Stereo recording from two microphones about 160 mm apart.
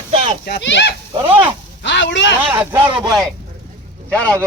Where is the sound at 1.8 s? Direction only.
90° left.